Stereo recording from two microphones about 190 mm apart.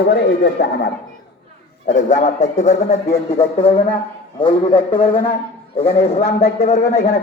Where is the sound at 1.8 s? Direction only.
40° left (ahead or behind).